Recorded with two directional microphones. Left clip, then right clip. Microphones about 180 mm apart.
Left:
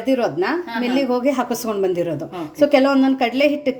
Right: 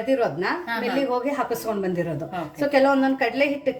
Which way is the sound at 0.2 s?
45° left (ahead or behind).